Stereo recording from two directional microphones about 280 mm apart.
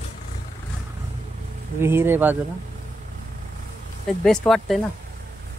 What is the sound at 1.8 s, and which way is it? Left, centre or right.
Speech, centre.